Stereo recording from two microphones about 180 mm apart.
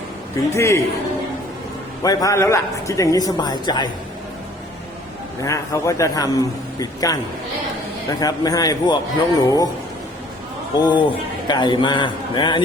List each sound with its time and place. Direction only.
0.5 s a man's voice: 15° left (ahead or behind)
2.0 s a man's voice: 15° left (ahead or behind)
5.4 s a man's voice: 15° left (ahead or behind)
8.2 s a man's voice: 20° left (ahead or behind)
10.8 s a man's voice: 25° left (ahead or behind)